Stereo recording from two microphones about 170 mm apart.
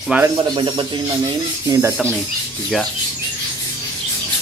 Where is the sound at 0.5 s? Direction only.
25° right (ahead or behind).